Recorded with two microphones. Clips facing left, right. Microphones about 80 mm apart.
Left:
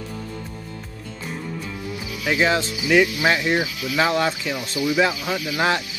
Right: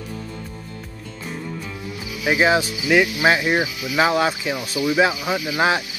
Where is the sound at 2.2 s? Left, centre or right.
Centre.